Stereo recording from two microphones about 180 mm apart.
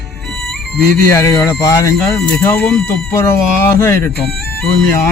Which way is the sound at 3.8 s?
15° left (ahead or behind).